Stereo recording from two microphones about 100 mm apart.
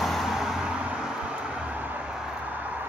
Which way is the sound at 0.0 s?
Centre (ahead or behind).